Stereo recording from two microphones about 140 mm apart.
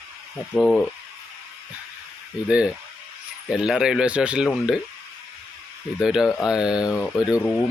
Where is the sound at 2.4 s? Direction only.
5° right (ahead or behind).